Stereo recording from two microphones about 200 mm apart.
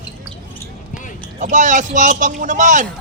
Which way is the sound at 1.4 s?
40° right (ahead or behind).